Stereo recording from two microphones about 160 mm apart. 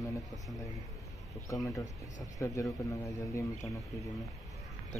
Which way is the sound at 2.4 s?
20° left (ahead or behind).